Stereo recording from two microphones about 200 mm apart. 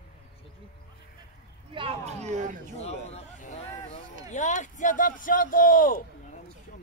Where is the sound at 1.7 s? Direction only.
25° right (ahead or behind).